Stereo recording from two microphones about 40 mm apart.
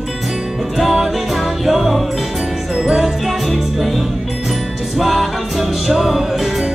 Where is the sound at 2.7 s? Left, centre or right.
Centre.